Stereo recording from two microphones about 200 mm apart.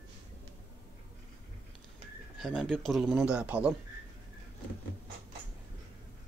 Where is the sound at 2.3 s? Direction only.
Centre (ahead or behind).